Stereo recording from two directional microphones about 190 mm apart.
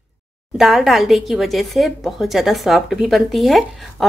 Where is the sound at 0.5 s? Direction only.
Centre (ahead or behind).